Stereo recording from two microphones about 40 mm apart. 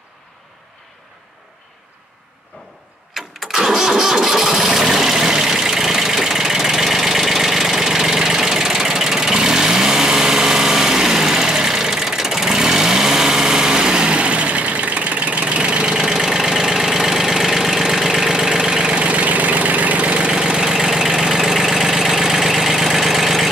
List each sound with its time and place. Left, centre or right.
3.2 s engine starting: centre; by 14.6 s right
15.4 s engine: right
16.1 s engine: centre
19.0 s engine: right
20.3 s engine: centre
20.7 s idling: centre